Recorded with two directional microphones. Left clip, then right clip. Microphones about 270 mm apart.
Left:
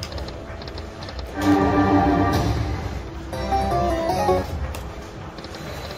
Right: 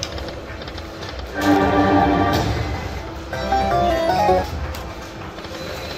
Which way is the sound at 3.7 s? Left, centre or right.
Left.